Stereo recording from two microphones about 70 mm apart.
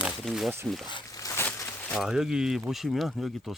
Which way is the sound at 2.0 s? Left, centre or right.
Centre.